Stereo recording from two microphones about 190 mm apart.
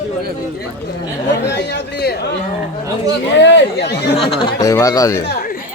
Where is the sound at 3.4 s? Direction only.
65° left (ahead or behind).